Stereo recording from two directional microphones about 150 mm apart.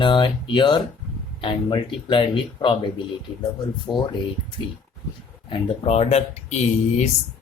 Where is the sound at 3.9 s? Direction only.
25° left (ahead or behind).